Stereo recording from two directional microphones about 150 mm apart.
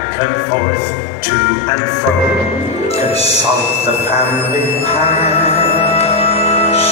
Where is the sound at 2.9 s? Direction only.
45° left (ahead or behind).